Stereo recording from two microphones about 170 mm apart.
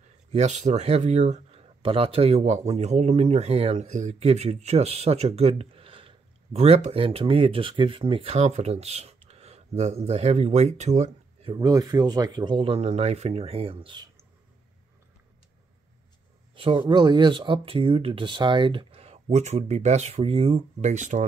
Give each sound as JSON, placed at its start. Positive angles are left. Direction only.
{"t": 0.3, "sound": "speech", "side_deg": -40}
{"t": 11.5, "sound": "speech", "side_deg": -20}
{"t": 16.5, "sound": "speech", "side_deg": -30}